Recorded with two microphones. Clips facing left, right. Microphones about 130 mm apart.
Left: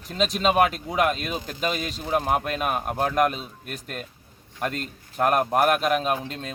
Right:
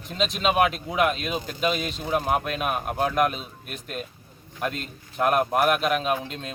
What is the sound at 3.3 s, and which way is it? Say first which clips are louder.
Speech: left 1 dB; 40° left (ahead or behind).